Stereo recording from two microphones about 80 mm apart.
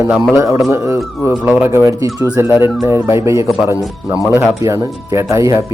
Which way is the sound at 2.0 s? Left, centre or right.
Right.